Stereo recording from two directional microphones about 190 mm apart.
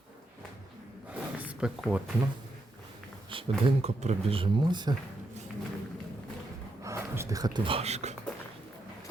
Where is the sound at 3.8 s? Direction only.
35° right (ahead or behind).